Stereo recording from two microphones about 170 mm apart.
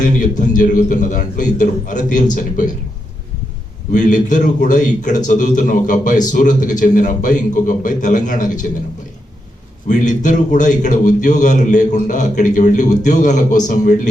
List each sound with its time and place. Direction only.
0.0 s speech: 50° left (ahead or behind)
3.9 s speech: 45° left (ahead or behind)
9.9 s speech: 45° left (ahead or behind)